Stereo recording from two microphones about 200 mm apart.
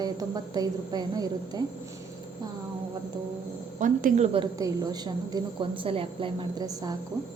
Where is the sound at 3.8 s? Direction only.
40° right (ahead or behind).